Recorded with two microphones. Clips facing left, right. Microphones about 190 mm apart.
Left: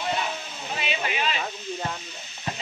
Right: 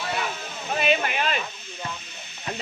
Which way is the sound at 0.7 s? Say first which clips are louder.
Right 6 dB; 55° right (ahead or behind).